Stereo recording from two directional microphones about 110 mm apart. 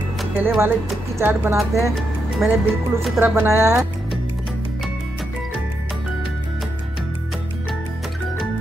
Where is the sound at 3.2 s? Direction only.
20° right (ahead or behind).